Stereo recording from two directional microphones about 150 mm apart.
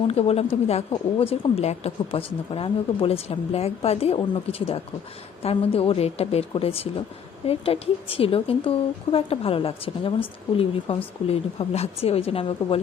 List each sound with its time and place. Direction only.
0.1 s a woman's voice: 40° left (ahead or behind)